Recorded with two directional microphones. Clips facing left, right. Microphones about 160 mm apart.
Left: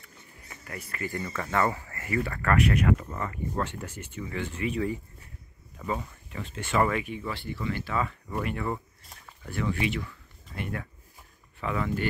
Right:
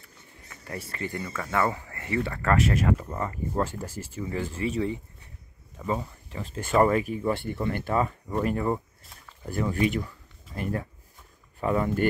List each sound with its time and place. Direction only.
0.7 s speech: 30° right (ahead or behind)
1.3 s speech: 5° right (ahead or behind)
2.0 s speech: 25° right (ahead or behind)
3.8 s speech: 35° right (ahead or behind)
8.4 s speech: 35° right (ahead or behind)